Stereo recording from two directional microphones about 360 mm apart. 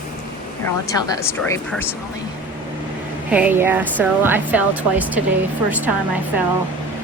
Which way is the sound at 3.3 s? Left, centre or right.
Centre.